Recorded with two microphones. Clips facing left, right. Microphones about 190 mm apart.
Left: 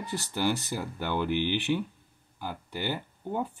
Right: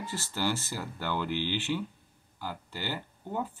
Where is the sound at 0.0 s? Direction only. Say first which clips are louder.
Left 3 dB; 15° left (ahead or behind).